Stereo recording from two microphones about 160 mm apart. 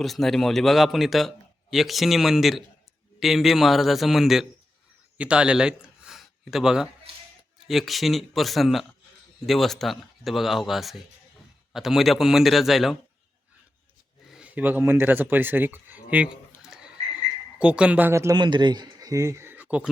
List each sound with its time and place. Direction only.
0.0 s speech: centre (ahead or behind)
14.3 s speech: 5° right (ahead or behind)
16.6 s frog: 5° right (ahead or behind)
17.6 s speech: 5° right (ahead or behind)